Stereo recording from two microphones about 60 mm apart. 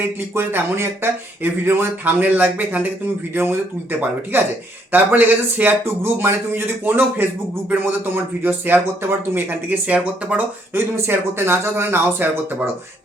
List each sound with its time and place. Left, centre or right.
0.0 s speech: right
3.3 s speech: right
10.8 s speech: right